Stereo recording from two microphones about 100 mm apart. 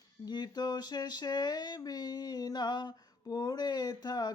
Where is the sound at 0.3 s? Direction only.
45° left (ahead or behind).